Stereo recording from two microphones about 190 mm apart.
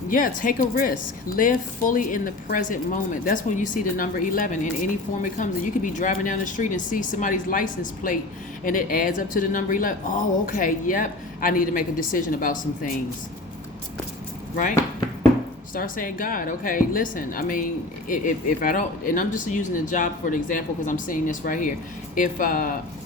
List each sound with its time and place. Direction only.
0.1 s speech: 45° left (ahead or behind)
15.7 s speech: 45° left (ahead or behind)